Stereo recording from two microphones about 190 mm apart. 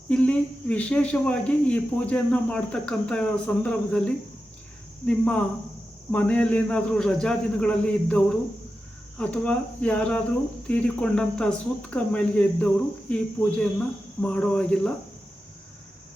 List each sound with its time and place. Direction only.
0.1 s speech: 5° left (ahead or behind)